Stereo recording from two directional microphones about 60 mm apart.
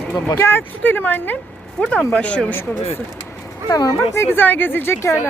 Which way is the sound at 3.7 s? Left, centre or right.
Left.